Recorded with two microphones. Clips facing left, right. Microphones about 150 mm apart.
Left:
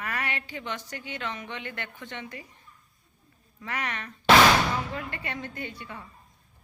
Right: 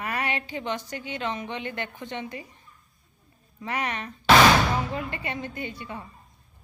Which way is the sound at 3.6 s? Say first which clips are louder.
Right 4 dB; 20° right (ahead or behind).